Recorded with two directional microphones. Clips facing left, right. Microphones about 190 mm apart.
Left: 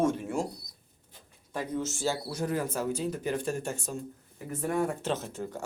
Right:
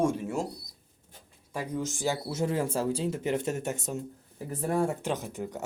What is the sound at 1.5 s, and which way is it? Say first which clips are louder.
Speech: even; 10° right (ahead or behind).